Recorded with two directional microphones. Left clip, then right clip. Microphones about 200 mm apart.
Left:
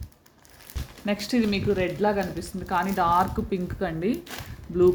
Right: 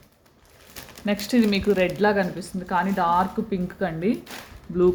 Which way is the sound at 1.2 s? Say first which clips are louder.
Right 5 dB; 5° right (ahead or behind).